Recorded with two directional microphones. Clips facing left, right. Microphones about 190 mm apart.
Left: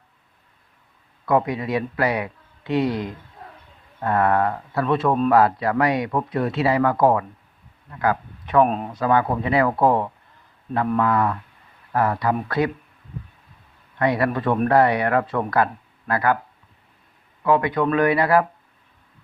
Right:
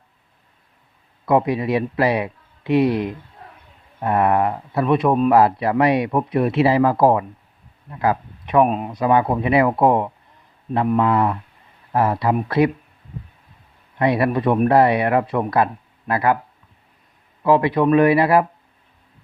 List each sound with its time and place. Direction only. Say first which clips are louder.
1.2 s speech: right 3 dB; 25° right (ahead or behind)
5.3 s speech: right 2 dB; 25° right (ahead or behind)
8.6 s speech: right 2 dB; 10° right (ahead or behind)
8.9 s speech: right 3 dB; 20° right (ahead or behind)
14.0 s speech: right 3 dB; 25° right (ahead or behind)
17.4 s speech: right 3 dB; 25° right (ahead or behind)